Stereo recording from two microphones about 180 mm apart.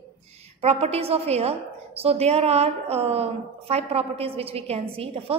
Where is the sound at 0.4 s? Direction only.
35° right (ahead or behind).